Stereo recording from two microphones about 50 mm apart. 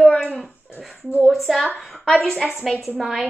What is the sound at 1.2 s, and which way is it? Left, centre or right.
Speech, centre.